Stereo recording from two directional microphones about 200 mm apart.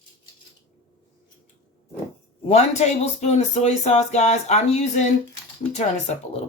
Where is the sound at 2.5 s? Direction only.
35° left (ahead or behind).